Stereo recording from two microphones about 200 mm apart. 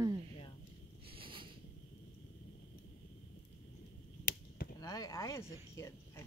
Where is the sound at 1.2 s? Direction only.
25° right (ahead or behind).